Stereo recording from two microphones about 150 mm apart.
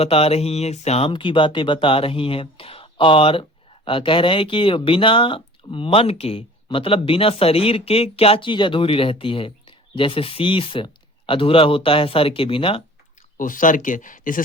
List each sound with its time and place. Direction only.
0.0 s speech: 40° left (ahead or behind)
13.3 s speech: 60° left (ahead or behind)